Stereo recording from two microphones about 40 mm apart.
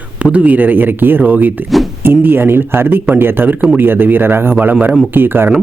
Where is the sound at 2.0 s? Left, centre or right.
Right.